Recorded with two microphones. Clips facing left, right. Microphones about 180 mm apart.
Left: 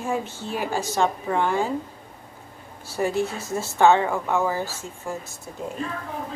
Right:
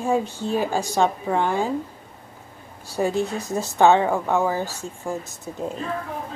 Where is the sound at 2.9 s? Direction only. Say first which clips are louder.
Right 1 dB; 15° right (ahead or behind).